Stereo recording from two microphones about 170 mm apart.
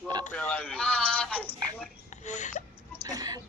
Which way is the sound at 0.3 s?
10° left (ahead or behind).